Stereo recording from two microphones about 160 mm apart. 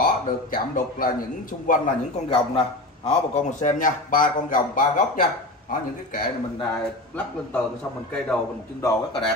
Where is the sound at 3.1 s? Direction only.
45° left (ahead or behind).